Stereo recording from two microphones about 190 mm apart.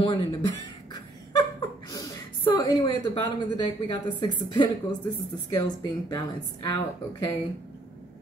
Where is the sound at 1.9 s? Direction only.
20° left (ahead or behind).